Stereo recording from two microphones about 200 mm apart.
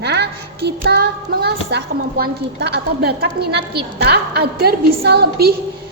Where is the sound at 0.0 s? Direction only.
55° right (ahead or behind).